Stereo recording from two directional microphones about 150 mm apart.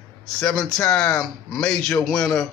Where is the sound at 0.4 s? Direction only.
5° left (ahead or behind).